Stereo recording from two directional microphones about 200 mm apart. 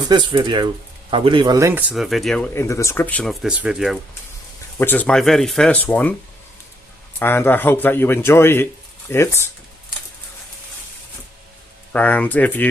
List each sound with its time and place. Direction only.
0.1 s speech: 25° right (ahead or behind)
1.9 s speech: centre (ahead or behind)
4.8 s speech: 10° left (ahead or behind)
7.2 s speech: 10° left (ahead or behind)
11.9 s speech: 5° left (ahead or behind)